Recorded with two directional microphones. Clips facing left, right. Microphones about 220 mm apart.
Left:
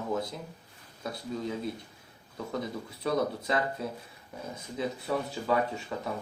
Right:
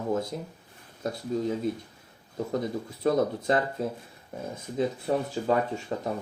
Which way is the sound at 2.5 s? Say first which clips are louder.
Right 4 dB; 45° right (ahead or behind).